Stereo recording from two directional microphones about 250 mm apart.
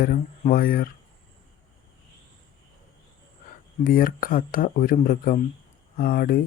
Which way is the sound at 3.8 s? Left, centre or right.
Left.